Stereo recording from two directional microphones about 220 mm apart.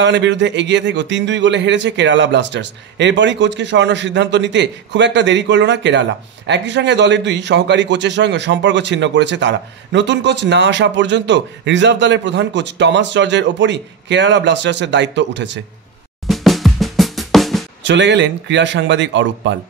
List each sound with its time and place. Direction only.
0.0 s speech: 55° right (ahead or behind)
16.3 s drum: centre (ahead or behind)
17.8 s speech: 55° right (ahead or behind)